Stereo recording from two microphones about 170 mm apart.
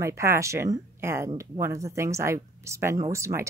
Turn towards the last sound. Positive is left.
turn(degrees=-15)  # may be behind; listen again after turning